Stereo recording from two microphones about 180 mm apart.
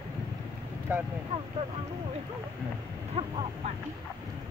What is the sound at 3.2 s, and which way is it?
Speech, 30° right (ahead or behind).